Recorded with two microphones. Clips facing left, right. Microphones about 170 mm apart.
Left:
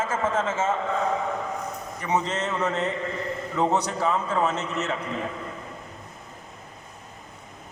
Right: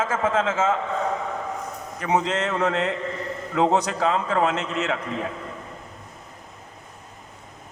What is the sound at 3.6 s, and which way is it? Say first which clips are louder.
A man's voice: right 3 dB; 90° right.